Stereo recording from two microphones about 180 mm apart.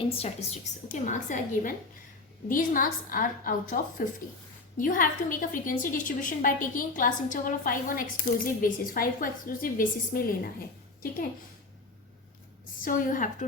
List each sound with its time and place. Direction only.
0.0 s a woman's voice: 35° left (ahead or behind); by 10.5 s 55° left (ahead or behind)
12.8 s a woman's voice: 50° left (ahead or behind)